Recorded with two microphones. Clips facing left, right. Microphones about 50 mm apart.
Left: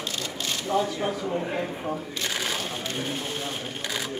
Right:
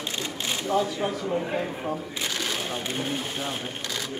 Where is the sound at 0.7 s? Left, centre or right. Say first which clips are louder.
Even; centre.